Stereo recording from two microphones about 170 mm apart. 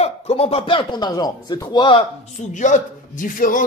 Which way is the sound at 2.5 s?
50° left (ahead or behind).